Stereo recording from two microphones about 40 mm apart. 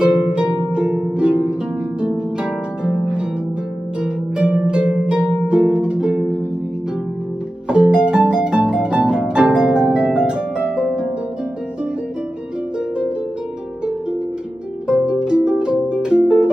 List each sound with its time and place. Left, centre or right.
0.0 s harp: right
2.8 s harp: right
4.4 s harp: right
7.6 s harp: right
14.9 s harp: right